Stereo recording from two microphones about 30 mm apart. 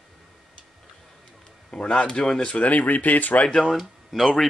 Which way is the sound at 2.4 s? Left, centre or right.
Left.